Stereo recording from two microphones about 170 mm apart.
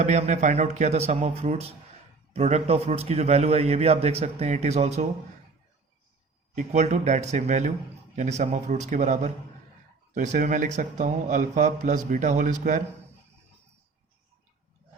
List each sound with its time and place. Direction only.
0.0 s a man's voice: 40° right (ahead or behind)
6.6 s a man's voice: 40° right (ahead or behind)